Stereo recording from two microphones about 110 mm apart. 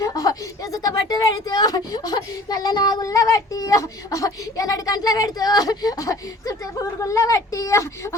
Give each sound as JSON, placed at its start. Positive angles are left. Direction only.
{"t": 0.0, "sound": "a woman's voice", "side_deg": 30}